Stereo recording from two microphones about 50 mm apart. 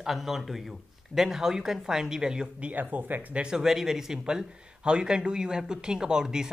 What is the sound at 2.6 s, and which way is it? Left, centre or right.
Speech, right.